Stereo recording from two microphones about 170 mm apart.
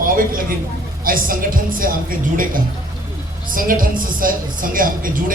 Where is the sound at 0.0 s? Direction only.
55° right (ahead or behind).